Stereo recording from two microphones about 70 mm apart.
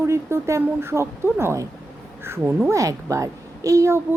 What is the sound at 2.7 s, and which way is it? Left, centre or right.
A woman's voice, right.